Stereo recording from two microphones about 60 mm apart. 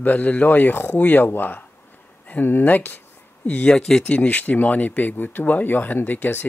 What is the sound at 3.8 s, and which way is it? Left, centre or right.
Speech, centre.